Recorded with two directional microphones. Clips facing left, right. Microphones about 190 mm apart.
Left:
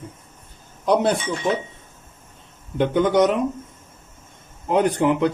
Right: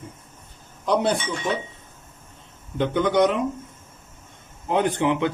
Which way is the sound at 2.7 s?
45° left (ahead or behind).